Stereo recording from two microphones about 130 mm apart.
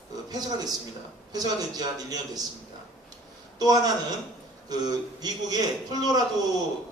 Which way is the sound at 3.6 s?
30° right (ahead or behind).